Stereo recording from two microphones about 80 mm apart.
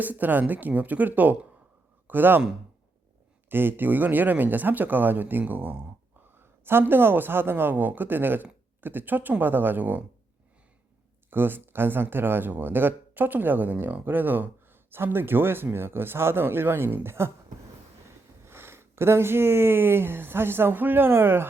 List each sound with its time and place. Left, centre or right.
0.0 s speech: right
3.5 s speech: right
11.3 s speech: right
18.4 s speech: right